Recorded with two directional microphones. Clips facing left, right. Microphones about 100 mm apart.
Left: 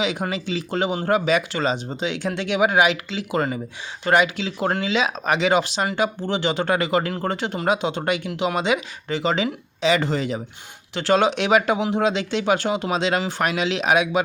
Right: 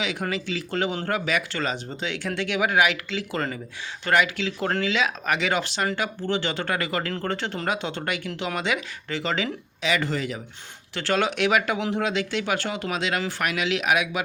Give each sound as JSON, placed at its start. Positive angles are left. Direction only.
{"t": 0.0, "sound": "speech", "side_deg": 20}